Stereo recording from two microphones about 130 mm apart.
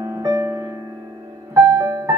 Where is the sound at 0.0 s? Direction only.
30° right (ahead or behind).